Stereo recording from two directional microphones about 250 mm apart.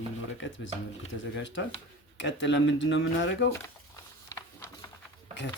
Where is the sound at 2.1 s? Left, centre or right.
Left.